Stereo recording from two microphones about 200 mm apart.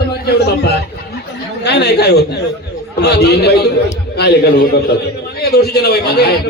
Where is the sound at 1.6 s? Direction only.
55° left (ahead or behind).